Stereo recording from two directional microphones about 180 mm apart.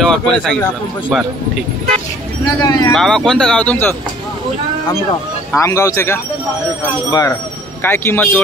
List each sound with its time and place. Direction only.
0.0 s speech: 5° left (ahead or behind)
2.4 s speech: 20° left (ahead or behind)
2.9 s speech: 5° left (ahead or behind)
5.5 s a man's voice: 15° left (ahead or behind)